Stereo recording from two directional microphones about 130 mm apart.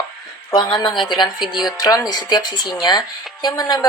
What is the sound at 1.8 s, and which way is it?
Speech, 30° left (ahead or behind).